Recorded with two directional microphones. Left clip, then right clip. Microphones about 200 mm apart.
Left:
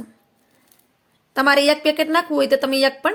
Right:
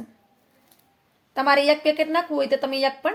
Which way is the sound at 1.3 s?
25° left (ahead or behind).